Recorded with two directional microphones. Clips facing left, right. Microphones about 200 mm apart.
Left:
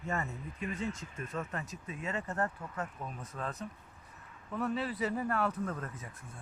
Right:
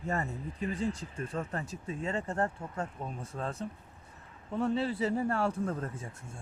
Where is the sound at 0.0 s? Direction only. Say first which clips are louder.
Right 3 dB; 35° right (ahead or behind).